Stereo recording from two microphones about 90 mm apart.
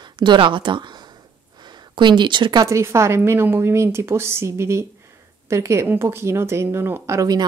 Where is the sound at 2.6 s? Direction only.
30° right (ahead or behind).